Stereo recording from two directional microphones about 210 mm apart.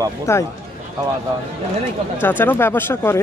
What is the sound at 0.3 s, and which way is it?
Speech, 15° left (ahead or behind).